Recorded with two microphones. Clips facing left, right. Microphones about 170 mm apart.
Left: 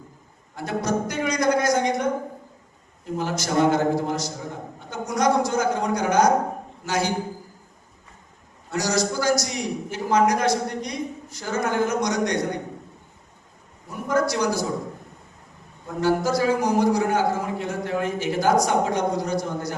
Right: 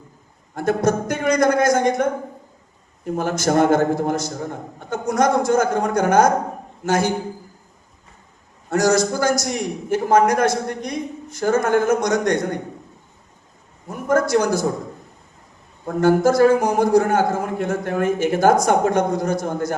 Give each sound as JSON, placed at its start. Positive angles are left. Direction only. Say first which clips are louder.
{"t": 0.5, "sound": "a man's voice", "louder": "right 6 dB", "side_deg": -50}
{"t": 8.7, "sound": "a man's voice", "louder": "right 6 dB", "side_deg": -50}
{"t": 13.8, "sound": "a man's voice", "louder": "right 4 dB", "side_deg": -50}
{"t": 16.0, "sound": "a man's voice", "louder": "right 7 dB", "side_deg": -50}